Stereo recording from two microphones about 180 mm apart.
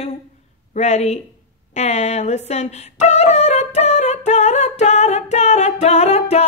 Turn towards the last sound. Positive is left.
turn(degrees=35)  # may be behind; listen again after turning